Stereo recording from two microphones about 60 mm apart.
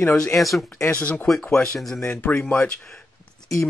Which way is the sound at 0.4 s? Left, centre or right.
Centre.